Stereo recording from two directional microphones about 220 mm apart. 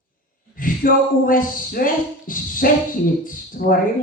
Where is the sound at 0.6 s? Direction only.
40° left (ahead or behind).